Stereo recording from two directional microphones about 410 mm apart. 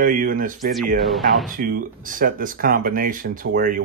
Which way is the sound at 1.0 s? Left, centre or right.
Centre.